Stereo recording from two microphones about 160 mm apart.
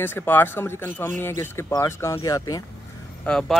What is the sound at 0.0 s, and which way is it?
Speech, 10° left (ahead or behind).